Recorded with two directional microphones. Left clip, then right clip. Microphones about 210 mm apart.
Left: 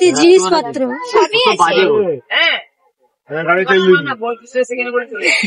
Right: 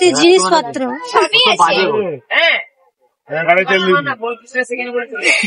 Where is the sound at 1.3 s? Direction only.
30° left (ahead or behind).